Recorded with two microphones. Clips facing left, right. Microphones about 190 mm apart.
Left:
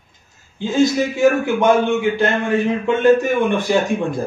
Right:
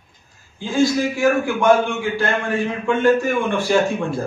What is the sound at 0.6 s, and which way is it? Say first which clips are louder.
A man's voice: left 2 dB; 20° left (ahead or behind).